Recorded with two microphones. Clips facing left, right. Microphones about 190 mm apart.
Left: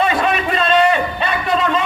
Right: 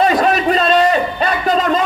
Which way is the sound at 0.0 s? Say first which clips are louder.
Right 4 dB; 40° right (ahead or behind).